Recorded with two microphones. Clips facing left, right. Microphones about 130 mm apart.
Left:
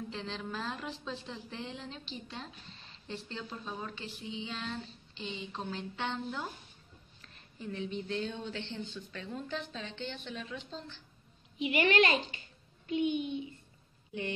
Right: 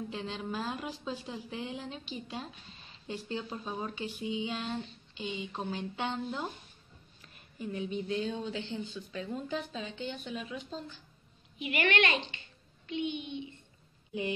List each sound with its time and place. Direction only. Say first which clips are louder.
0.1 s speech: right 2 dB; 15° right (ahead or behind)
11.5 s a woman's voice: left 2 dB; 30° left (ahead or behind)